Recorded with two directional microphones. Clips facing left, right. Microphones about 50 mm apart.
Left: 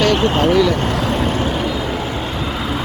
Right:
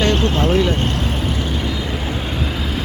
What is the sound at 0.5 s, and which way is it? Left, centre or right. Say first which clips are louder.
Vehicle: left 3 dB; left.